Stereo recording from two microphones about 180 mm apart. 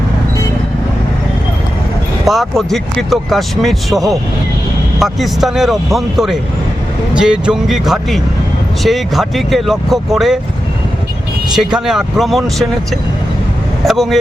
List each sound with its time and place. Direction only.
2.2 s speech: centre (ahead or behind)
11.5 s speech: centre (ahead or behind)
13.8 s speech: centre (ahead or behind)